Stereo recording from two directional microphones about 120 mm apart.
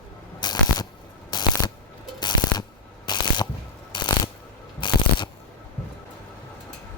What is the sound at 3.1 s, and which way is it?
Ratchet, 40° left (ahead or behind).